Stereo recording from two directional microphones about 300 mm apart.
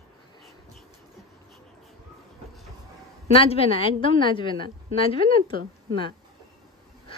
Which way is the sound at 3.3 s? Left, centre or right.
Centre.